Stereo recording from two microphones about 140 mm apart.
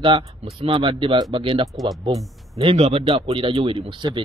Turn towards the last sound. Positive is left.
turn(degrees=-35)  # may be behind; listen again after turning